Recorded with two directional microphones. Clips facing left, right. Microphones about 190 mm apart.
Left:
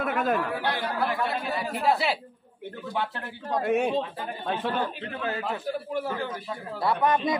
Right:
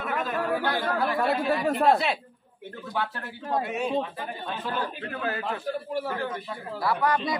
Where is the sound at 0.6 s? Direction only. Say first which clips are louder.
Right 2 dB; 50° right (ahead or behind).